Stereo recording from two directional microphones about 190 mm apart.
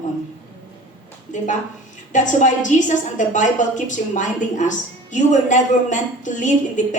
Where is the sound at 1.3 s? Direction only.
40° left (ahead or behind).